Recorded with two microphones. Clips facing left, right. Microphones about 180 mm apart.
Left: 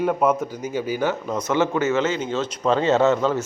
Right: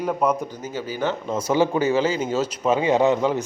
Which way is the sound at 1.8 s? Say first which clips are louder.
Right 1 dB; 35° right (ahead or behind).